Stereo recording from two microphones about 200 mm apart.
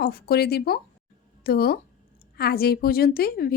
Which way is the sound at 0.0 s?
50° left (ahead or behind).